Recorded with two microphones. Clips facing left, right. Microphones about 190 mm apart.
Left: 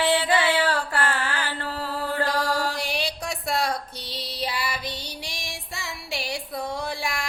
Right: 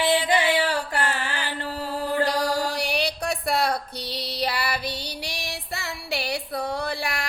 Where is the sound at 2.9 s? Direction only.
60° right (ahead or behind).